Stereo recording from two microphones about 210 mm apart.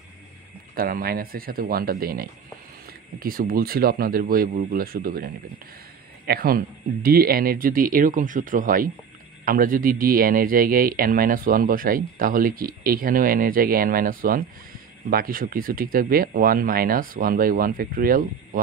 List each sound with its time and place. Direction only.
0.7 s speech: 45° right (ahead or behind)